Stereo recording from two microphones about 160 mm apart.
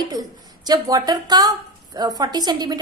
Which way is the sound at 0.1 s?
25° right (ahead or behind).